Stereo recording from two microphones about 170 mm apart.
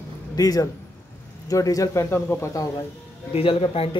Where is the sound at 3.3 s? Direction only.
35° left (ahead or behind).